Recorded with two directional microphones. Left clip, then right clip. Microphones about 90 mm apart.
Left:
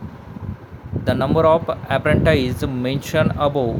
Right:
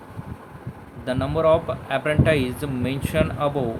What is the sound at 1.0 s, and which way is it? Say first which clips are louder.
Speech: left 4 dB; 70° left (ahead or behind).